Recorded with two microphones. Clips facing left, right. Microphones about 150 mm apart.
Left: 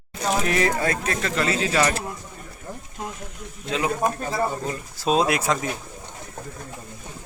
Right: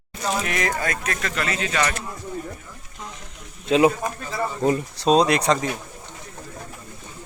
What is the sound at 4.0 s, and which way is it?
Speech, 50° left (ahead or behind).